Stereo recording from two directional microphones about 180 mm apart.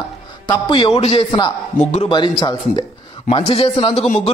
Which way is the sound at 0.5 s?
25° left (ahead or behind).